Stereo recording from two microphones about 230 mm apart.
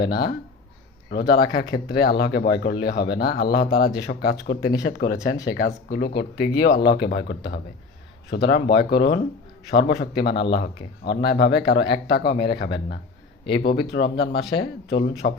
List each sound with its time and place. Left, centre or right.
1.1 s speech: left